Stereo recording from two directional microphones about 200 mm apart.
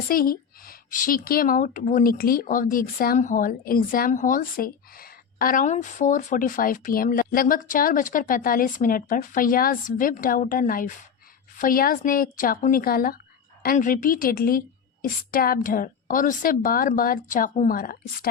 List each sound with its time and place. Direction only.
0.1 s speech: 45° left (ahead or behind)